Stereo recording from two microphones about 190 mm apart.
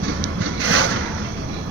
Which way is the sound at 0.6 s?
90° right.